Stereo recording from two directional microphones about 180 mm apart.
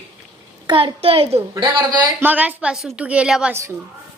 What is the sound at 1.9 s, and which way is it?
A woman's voice, 10° right (ahead or behind).